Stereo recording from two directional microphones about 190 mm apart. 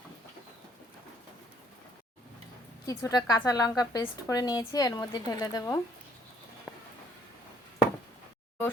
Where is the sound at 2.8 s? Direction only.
20° left (ahead or behind).